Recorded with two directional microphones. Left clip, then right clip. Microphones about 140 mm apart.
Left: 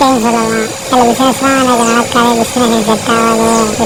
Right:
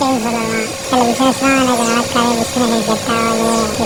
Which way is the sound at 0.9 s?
10° left (ahead or behind).